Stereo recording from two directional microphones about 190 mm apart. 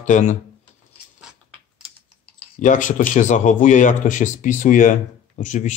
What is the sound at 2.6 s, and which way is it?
Speech, 40° left (ahead or behind).